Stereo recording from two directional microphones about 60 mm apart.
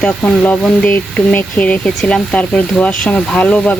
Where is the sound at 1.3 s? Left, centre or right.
Left.